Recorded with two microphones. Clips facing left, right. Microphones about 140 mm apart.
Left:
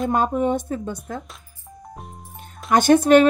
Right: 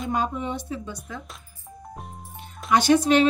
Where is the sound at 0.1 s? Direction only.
50° left (ahead or behind).